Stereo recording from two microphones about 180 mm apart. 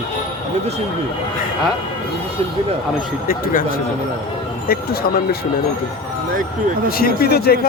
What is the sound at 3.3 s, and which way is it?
Speech, 50° left (ahead or behind).